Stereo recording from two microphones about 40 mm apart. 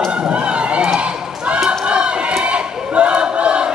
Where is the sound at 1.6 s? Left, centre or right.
Right.